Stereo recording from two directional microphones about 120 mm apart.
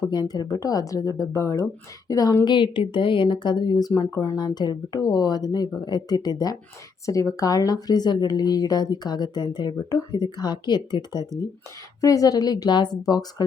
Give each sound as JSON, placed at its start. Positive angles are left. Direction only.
{"t": 0.1, "sound": "speech", "side_deg": 35}